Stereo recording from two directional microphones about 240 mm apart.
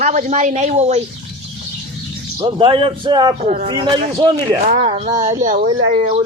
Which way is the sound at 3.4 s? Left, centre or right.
Right.